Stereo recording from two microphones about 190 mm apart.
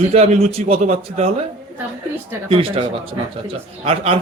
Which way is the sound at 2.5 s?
30° right (ahead or behind).